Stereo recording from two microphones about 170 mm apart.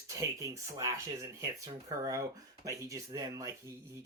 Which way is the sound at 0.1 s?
15° right (ahead or behind).